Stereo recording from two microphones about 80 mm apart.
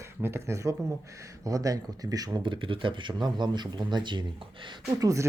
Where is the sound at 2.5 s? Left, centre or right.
Right.